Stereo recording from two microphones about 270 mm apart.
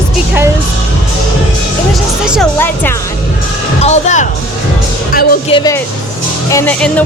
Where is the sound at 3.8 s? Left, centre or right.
Left.